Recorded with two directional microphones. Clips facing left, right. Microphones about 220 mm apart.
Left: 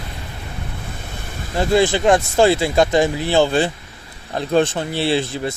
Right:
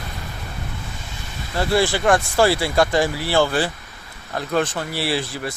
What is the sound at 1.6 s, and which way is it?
Speech, 20° left (ahead or behind).